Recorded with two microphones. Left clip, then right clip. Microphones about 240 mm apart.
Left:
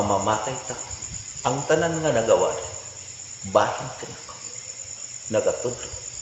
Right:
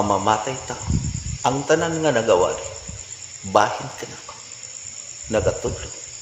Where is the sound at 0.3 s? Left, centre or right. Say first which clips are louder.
Right 4 dB; right.